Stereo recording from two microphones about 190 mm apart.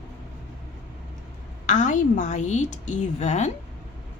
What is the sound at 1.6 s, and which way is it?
A woman's voice, 40° left (ahead or behind).